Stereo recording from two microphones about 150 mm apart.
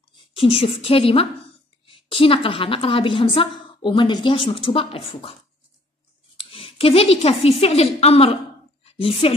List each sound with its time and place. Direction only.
0.1 s a woman's voice: 35° left (ahead or behind)
6.3 s a woman's voice: 40° left (ahead or behind)